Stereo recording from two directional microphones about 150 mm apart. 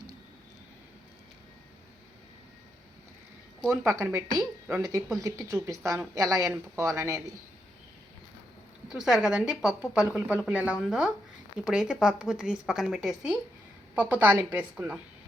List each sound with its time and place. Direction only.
3.7 s a man's voice: 20° right (ahead or behind)
8.9 s a woman's voice: 5° right (ahead or behind)